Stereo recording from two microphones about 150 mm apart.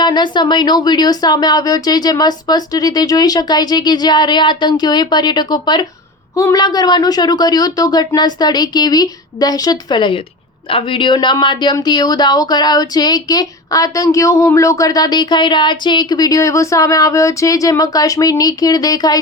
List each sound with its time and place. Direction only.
0.0 s speech: 30° left (ahead or behind)